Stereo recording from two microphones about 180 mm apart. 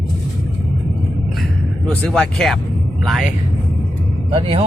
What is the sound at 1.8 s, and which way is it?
Speech, 5° left (ahead or behind).